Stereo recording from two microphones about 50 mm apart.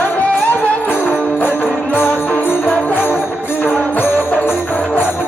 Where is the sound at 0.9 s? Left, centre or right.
Left.